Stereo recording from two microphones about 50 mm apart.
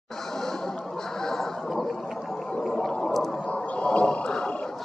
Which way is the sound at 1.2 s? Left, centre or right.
Centre.